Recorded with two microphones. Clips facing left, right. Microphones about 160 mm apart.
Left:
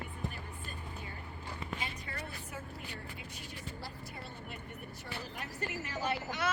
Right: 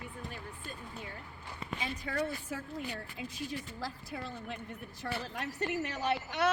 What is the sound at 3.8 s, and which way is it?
Speech, 90° right.